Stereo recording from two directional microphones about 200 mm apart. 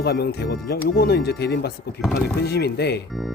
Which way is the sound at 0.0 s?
50° left (ahead or behind).